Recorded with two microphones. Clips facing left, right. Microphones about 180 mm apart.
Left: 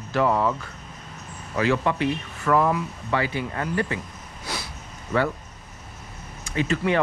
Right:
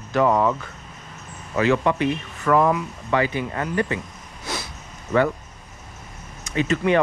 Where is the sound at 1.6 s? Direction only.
15° right (ahead or behind).